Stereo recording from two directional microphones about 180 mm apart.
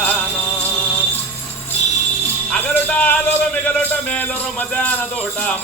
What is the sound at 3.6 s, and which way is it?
Speech, 5° left (ahead or behind).